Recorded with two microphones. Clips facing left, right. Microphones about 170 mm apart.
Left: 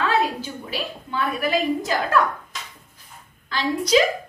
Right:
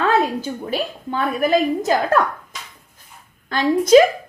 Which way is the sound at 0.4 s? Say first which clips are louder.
Right 6 dB; 45° right (ahead or behind).